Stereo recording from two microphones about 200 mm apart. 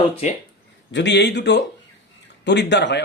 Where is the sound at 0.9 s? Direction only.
65° left (ahead or behind).